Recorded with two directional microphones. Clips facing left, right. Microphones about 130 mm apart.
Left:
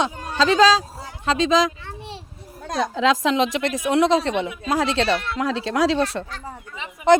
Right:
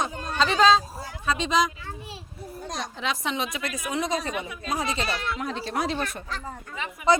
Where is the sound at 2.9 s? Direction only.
90° left.